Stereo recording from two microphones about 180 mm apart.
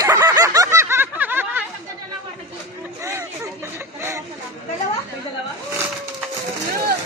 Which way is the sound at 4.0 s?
15° right (ahead or behind).